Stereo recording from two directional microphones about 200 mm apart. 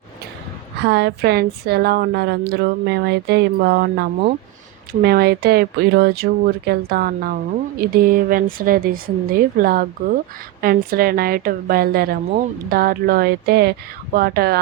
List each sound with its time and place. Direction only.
0.9 s a woman's voice: 55° right (ahead or behind)